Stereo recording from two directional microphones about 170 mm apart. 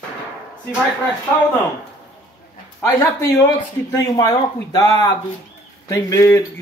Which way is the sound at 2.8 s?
20° left (ahead or behind).